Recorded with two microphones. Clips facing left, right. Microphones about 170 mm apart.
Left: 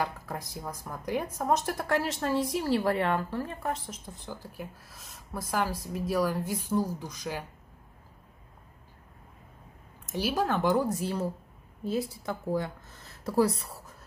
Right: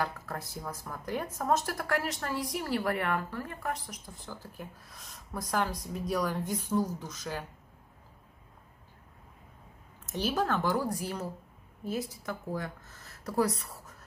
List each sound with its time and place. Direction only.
0.0 s speech: 10° left (ahead or behind)
4.4 s speech: 5° left (ahead or behind)
10.1 s speech: 10° left (ahead or behind); by 13.7 s 30° left (ahead or behind)